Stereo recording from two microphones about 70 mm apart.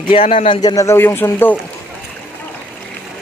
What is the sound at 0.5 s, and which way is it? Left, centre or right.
Speech, left.